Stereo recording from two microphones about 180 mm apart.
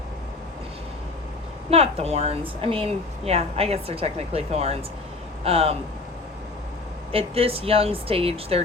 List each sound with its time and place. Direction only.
1.7 s speech: 35° right (ahead or behind)
7.1 s speech: 30° right (ahead or behind)